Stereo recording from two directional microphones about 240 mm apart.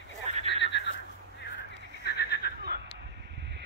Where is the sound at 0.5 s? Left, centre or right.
Left.